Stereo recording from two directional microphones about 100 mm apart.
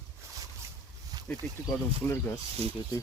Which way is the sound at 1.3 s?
20° left (ahead or behind).